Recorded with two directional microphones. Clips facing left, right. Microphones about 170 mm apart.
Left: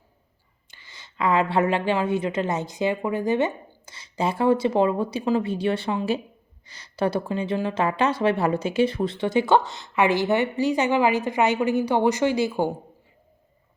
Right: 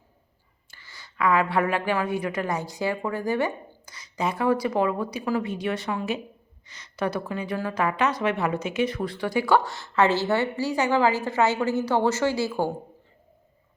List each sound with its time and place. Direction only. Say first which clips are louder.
0.7 s speech: even; 20° left (ahead or behind)